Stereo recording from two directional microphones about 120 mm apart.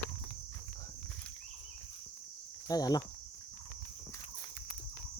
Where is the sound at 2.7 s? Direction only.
35° left (ahead or behind).